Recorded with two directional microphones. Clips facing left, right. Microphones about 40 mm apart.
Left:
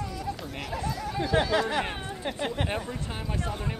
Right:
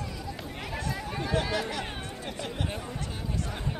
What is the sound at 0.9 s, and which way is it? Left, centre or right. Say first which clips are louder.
Speech: left 3 dB; right.